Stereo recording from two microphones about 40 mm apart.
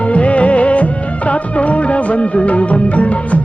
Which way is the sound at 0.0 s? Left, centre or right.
Left.